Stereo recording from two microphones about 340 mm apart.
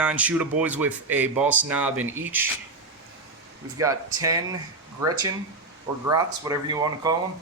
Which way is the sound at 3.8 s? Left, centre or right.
Centre.